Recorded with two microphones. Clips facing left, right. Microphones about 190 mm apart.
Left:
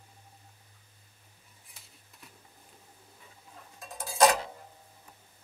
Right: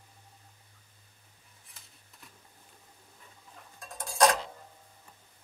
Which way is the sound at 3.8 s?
5° left (ahead or behind).